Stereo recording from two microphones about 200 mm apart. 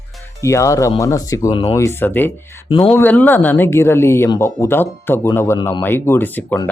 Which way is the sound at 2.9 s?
10° left (ahead or behind).